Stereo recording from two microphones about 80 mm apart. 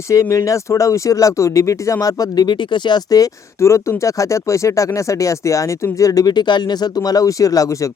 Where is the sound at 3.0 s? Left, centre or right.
Left.